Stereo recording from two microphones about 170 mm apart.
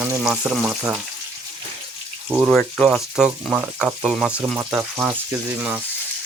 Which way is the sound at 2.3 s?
5° right (ahead or behind).